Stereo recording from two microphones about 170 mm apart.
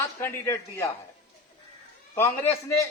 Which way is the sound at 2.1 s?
15° left (ahead or behind).